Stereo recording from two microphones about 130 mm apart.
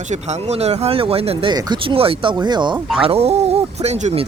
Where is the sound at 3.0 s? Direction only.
50° right (ahead or behind).